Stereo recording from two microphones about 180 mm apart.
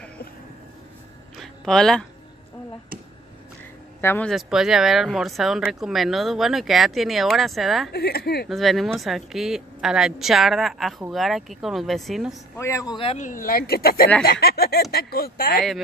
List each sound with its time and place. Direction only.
1.4 s a sound: 5° left (ahead or behind)
4.0 s speech: 10° left (ahead or behind)
4.3 s speech: centre (ahead or behind)
7.9 s speech: 65° left (ahead or behind)
8.5 s speech: centre (ahead or behind)
12.5 s speech: 15° left (ahead or behind)
13.2 s speech: 50° left (ahead or behind)